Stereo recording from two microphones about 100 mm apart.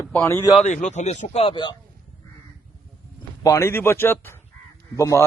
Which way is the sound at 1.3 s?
75° left (ahead or behind).